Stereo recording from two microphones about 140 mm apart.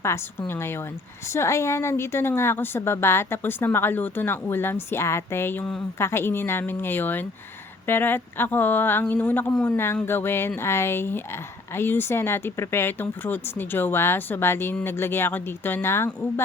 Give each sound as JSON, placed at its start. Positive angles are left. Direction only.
{"t": 0.0, "sound": "a woman's voice", "side_deg": 20}